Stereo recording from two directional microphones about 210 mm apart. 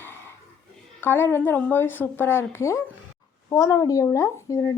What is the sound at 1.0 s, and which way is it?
Speech, 10° left (ahead or behind).